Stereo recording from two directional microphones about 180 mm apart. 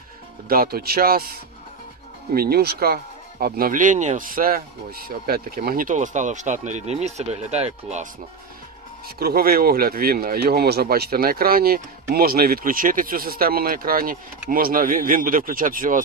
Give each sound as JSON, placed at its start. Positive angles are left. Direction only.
{"t": 0.4, "sound": "speech", "side_deg": -55}
{"t": 9.0, "sound": "speech", "side_deg": -60}